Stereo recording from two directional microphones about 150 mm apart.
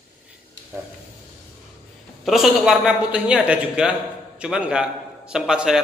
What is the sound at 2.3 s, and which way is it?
A man's voice, 5° right (ahead or behind).